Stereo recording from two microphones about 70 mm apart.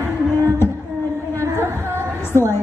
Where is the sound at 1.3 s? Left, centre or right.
Right.